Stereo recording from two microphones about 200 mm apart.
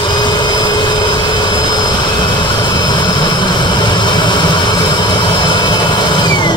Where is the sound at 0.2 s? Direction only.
20° left (ahead or behind).